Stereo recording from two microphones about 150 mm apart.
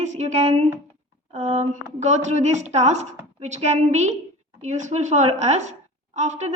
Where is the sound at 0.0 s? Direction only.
50° right (ahead or behind).